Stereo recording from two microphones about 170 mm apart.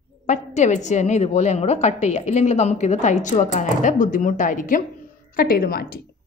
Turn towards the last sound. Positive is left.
turn(degrees=60)  # may be behind; listen again after turning